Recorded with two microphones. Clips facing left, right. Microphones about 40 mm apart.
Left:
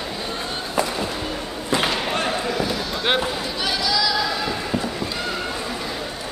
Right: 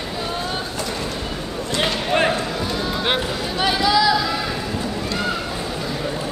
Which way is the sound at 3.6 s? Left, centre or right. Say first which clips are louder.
Right 6 dB; right.